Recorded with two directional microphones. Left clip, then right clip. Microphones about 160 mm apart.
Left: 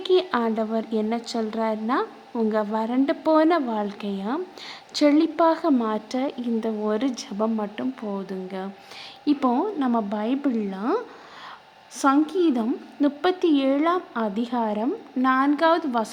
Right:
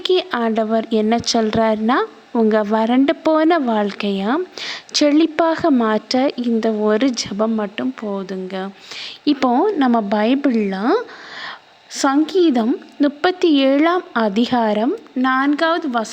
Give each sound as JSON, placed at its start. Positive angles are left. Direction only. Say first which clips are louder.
{"t": 0.0, "sound": "a woman's voice", "louder": "right 4 dB", "side_deg": -35}